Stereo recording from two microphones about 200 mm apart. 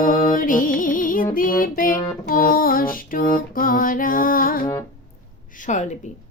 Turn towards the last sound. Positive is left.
turn(degrees=35)  # may be behind; listen again after turning